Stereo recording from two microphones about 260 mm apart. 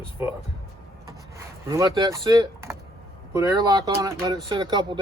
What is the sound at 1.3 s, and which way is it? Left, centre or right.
Speech, centre.